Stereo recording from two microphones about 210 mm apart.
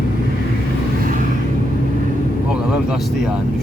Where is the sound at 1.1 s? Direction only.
40° right (ahead or behind).